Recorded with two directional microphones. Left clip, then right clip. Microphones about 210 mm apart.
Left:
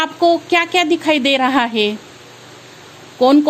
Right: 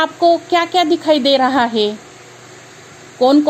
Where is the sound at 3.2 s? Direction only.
20° left (ahead or behind).